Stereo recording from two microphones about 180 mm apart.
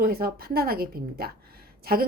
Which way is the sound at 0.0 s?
55° right (ahead or behind).